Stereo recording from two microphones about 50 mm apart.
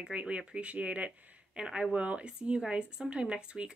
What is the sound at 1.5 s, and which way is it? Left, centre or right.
Speech, centre.